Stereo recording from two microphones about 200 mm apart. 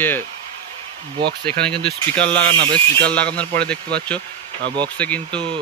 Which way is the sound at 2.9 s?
5° left (ahead or behind).